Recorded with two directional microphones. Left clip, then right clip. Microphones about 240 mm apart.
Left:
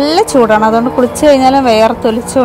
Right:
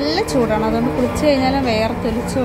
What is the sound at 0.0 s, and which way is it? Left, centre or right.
A woman's voice, left.